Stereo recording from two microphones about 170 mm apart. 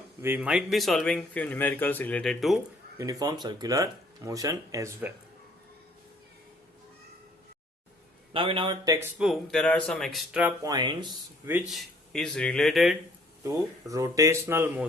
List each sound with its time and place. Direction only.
0.2 s speech: 10° right (ahead or behind)
3.0 s speech: 20° right (ahead or behind)
8.3 s speech: 30° right (ahead or behind)
9.1 s speech: centre (ahead or behind)
10.6 s speech: 25° right (ahead or behind)
11.7 s speech: 5° left (ahead or behind)
13.4 s speech: 20° right (ahead or behind)